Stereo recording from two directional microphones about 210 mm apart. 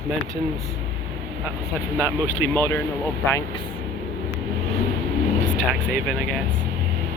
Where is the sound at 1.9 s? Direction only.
5° left (ahead or behind).